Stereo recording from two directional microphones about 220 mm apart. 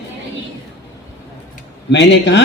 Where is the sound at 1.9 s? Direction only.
55° left (ahead or behind).